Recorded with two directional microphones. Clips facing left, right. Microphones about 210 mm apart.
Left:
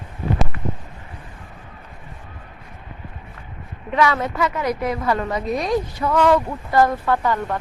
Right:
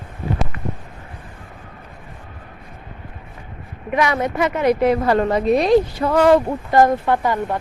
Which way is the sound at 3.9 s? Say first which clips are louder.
Right 1 dB; 15° right (ahead or behind).